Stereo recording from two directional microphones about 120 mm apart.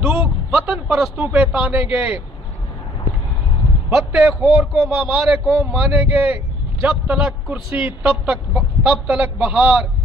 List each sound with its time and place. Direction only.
0.0 s a man's voice: 10° right (ahead or behind)
3.9 s a man's voice: 5° right (ahead or behind)